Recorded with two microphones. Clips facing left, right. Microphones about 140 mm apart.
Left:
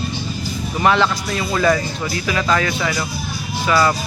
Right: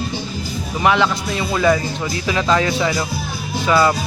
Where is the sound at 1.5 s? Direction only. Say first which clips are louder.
Right 1 dB; 10° right (ahead or behind).